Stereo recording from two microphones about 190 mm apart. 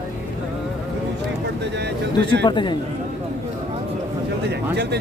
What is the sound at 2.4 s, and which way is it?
Speech, 25° left (ahead or behind).